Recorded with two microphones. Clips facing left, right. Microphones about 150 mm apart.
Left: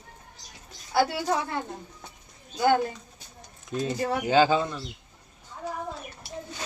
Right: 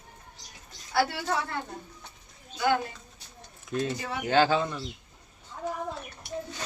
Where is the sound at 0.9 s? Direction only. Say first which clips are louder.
Left 3 dB; 20° left (ahead or behind).